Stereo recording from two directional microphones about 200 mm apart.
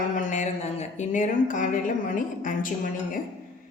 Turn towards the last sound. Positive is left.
turn(degrees=40)  # may be behind; listen again after turning